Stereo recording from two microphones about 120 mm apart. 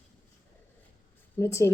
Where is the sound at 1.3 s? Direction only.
25° left (ahead or behind).